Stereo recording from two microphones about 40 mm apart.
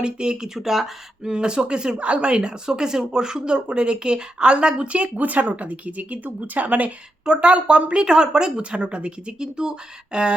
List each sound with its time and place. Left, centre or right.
0.0 s speech: right
1.3 s speech: right
7.3 s speech: right